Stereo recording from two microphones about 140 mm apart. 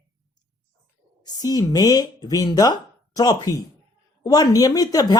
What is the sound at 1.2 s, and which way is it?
Speech, 25° left (ahead or behind).